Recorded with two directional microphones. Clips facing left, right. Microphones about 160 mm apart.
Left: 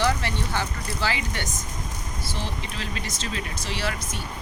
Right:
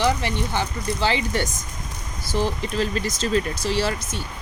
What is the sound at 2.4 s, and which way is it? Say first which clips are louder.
Speech: right 12 dB; 40° right (ahead or behind).